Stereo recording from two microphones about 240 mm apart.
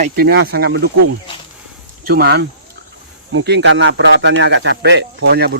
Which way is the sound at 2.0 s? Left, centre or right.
Right.